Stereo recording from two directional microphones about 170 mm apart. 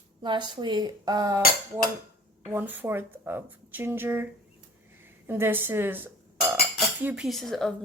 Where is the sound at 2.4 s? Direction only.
10° right (ahead or behind).